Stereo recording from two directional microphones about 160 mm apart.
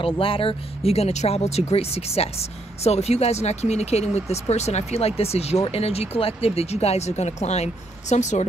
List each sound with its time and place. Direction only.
0.0 s speech: 35° left (ahead or behind)